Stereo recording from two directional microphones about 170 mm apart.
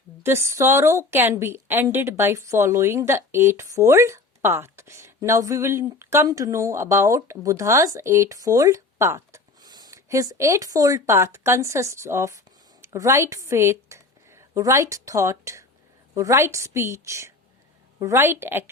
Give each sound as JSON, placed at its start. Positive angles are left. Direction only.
{"t": 0.2, "sound": "a woman's voice", "side_deg": -15}